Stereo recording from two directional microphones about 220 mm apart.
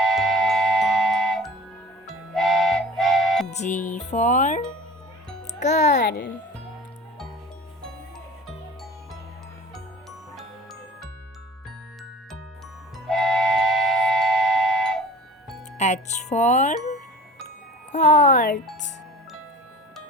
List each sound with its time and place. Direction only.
0.0 s music: centre (ahead or behind)
3.5 s music: 30° left (ahead or behind)
3.9 s a child's voice: 30° left (ahead or behind)
6.0 s a child's voice: 50° left (ahead or behind)
10.3 s music: centre (ahead or behind)
13.1 s train: centre (ahead or behind)
15.8 s speech: 30° left (ahead or behind)
17.9 s speech: 35° left (ahead or behind)